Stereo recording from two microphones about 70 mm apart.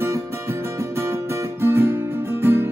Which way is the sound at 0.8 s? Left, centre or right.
Right.